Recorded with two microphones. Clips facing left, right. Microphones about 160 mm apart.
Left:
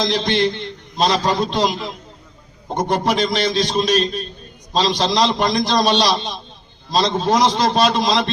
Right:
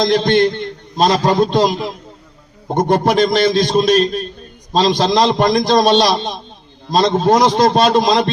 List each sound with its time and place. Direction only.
0.0 s a man's voice: 45° right (ahead or behind)